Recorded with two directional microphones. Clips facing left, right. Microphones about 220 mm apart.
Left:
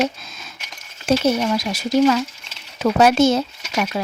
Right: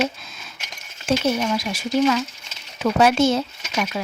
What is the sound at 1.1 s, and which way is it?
Speech, 40° left (ahead or behind).